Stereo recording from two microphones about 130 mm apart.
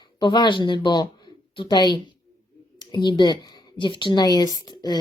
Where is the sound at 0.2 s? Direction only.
35° left (ahead or behind).